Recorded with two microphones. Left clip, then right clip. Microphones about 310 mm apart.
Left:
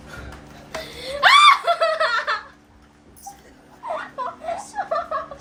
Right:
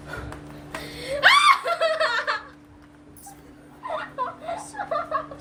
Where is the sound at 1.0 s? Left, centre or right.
Centre.